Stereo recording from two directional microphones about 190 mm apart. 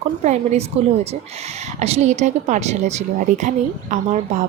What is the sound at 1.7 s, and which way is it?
A woman's voice, 35° right (ahead or behind).